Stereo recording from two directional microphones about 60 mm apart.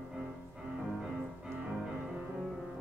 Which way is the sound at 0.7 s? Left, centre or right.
Centre.